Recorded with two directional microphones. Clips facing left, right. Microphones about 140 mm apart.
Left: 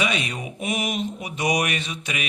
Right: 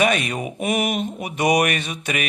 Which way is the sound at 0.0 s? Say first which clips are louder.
Right 6 dB; 50° right (ahead or behind).